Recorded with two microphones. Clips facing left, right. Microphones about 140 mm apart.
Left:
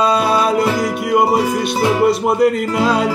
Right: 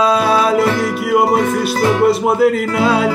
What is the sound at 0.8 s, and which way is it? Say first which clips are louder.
Music: right 1 dB; centre (ahead or behind).